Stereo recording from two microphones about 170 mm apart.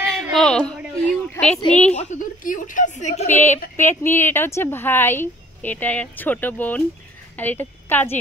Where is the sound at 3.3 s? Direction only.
10° left (ahead or behind).